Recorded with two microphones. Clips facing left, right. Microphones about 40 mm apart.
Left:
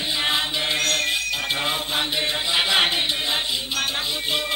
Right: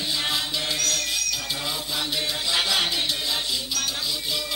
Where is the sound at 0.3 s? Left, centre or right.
Left.